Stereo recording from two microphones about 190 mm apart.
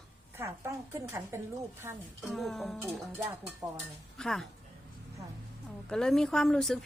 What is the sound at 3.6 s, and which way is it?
Speech, 20° right (ahead or behind).